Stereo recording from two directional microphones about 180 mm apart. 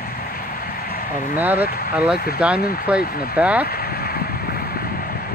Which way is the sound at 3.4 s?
5° right (ahead or behind).